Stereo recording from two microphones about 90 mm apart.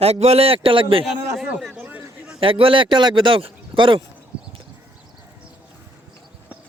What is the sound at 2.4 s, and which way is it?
A man's voice, 75° right (ahead or behind).